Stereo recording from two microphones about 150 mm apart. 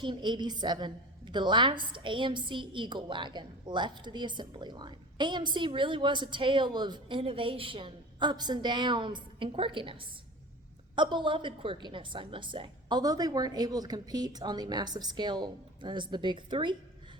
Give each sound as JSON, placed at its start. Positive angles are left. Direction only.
{"t": 0.0, "sound": "a woman's voice", "side_deg": -30}